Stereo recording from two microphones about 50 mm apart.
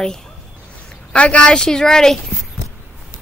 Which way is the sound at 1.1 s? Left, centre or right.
Left.